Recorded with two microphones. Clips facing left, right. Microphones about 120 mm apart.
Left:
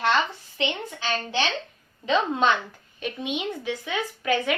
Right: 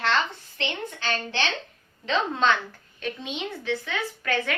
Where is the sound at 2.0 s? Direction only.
15° left (ahead or behind).